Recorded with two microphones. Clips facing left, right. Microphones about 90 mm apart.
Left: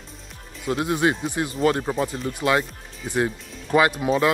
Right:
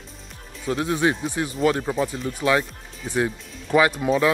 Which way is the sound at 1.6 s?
Centre (ahead or behind).